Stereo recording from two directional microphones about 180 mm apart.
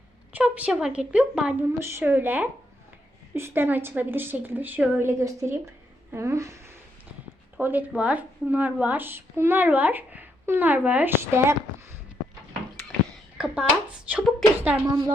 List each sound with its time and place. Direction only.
0.3 s speech: 10° right (ahead or behind)
13.4 s speech: 5° right (ahead or behind)